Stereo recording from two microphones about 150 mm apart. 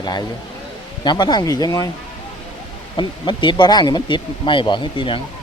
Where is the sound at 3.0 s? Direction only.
30° left (ahead or behind).